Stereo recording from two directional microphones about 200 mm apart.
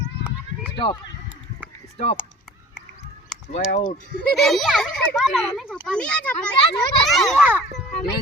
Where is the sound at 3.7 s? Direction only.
35° left (ahead or behind).